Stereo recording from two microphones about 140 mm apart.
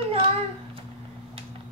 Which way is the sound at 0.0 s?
40° right (ahead or behind).